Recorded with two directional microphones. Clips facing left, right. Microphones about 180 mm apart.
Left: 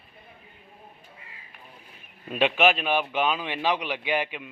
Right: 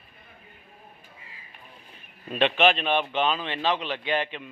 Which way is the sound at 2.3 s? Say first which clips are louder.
Even; 10° left (ahead or behind).